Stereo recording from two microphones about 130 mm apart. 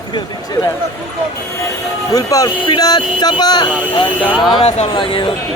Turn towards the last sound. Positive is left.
turn(degrees=40)  # may be behind; listen again after turning